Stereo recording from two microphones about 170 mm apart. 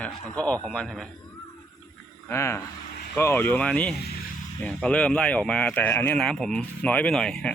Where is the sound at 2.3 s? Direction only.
15° left (ahead or behind).